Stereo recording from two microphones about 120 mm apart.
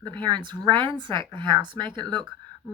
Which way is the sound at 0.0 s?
35° right (ahead or behind).